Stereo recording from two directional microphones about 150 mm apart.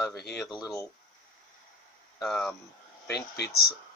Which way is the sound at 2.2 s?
Centre (ahead or behind).